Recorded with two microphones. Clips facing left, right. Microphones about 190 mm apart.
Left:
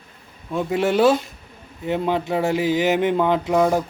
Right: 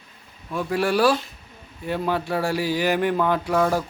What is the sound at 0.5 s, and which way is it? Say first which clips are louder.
Speech: left 3 dB; 20° left (ahead or behind).